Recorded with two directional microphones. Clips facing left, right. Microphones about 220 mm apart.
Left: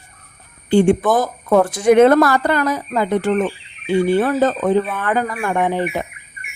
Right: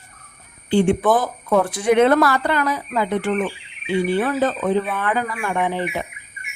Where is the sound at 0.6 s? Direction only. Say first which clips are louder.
Left 3 dB; 45° left (ahead or behind).